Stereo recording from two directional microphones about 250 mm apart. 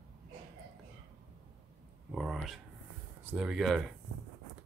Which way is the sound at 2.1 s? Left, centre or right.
Centre.